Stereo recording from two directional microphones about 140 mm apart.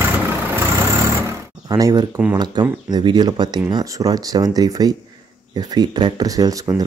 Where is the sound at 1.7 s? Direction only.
25° right (ahead or behind).